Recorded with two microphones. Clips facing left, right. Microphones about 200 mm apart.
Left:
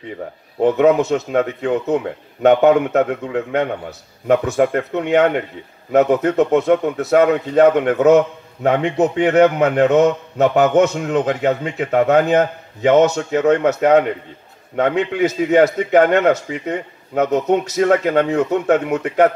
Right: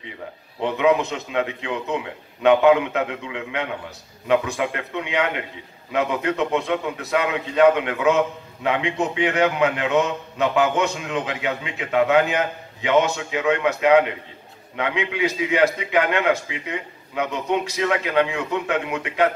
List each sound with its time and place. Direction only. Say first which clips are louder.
0.6 s a man's voice: left 6 dB; 45° left (ahead or behind)